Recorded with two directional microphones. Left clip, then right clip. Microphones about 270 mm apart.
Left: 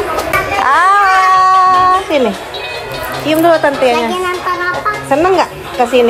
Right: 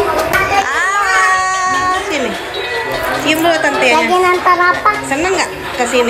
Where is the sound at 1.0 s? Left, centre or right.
Centre.